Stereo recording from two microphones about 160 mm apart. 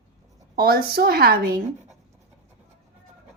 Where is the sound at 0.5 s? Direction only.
70° right (ahead or behind).